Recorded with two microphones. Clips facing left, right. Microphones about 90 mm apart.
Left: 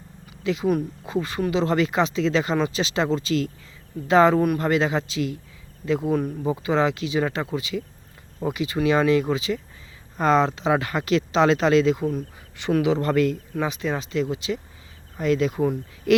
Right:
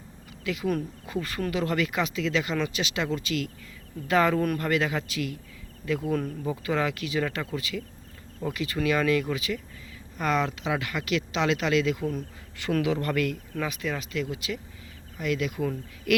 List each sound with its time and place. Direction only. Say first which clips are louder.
0.4 s speech: left 6 dB; 25° left (ahead or behind)